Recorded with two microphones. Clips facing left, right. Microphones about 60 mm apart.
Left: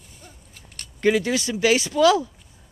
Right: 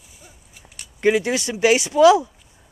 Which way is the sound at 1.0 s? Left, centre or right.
Right.